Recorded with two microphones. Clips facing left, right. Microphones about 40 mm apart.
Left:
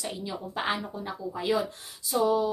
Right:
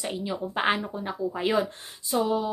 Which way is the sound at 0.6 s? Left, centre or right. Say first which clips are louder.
Right 4 dB; right.